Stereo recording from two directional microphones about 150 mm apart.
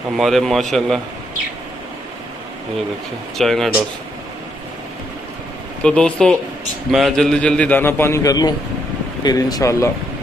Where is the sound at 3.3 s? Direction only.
Centre (ahead or behind).